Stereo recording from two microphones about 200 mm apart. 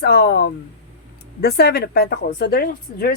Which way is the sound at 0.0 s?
55° left (ahead or behind).